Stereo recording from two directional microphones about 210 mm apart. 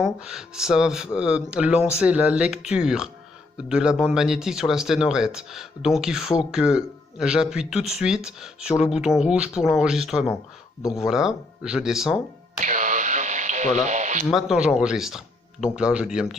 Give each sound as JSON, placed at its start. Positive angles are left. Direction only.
{"t": 0.0, "sound": "speech", "side_deg": 0}
{"t": 12.5, "sound": "a sound", "side_deg": -35}
{"t": 14.3, "sound": "speech", "side_deg": 0}